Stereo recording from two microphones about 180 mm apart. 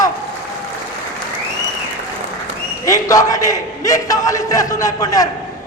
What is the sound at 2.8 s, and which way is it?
A man's voice, 20° left (ahead or behind).